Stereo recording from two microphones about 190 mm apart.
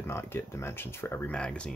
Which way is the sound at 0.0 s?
15° left (ahead or behind).